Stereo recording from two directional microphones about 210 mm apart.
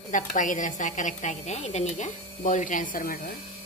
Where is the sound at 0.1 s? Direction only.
40° left (ahead or behind).